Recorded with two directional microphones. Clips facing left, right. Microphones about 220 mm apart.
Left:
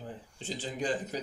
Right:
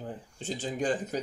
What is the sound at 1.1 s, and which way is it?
Speech, 50° right (ahead or behind).